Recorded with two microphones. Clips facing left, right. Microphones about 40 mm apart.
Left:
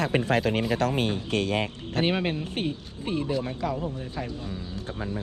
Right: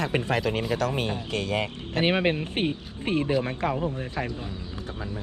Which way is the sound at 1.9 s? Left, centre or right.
Right.